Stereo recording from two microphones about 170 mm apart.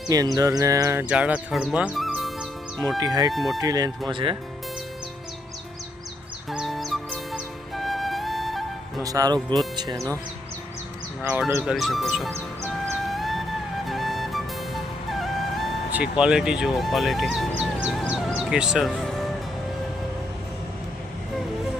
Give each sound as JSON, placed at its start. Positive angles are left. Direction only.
{"t": 0.1, "sound": "speech", "side_deg": -20}
{"t": 3.0, "sound": "speech", "side_deg": -20}
{"t": 3.3, "sound": "speech", "side_deg": 0}
{"t": 3.6, "sound": "speech", "side_deg": -20}
{"t": 6.5, "sound": "music", "side_deg": 0}
{"t": 9.0, "sound": "speech", "side_deg": -20}
{"t": 11.2, "sound": "speech", "side_deg": -10}
{"t": 13.1, "sound": "music", "side_deg": 0}